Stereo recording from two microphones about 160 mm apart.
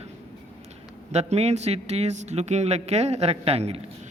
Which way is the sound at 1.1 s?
40° right (ahead or behind).